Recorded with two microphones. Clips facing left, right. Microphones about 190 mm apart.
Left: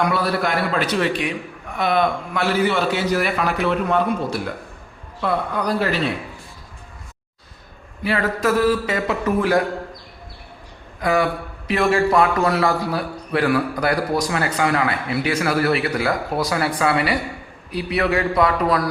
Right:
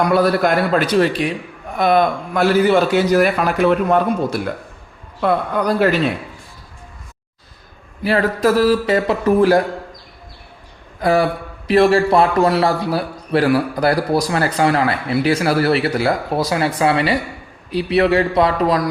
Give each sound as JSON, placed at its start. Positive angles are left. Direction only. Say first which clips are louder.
{"t": 0.2, "sound": "a man's voice", "louder": "right 6 dB", "side_deg": -45}
{"t": 8.0, "sound": "a man's voice", "louder": "right 5 dB", "side_deg": -35}
{"t": 11.0, "sound": "a man's voice", "louder": "right 4 dB", "side_deg": -35}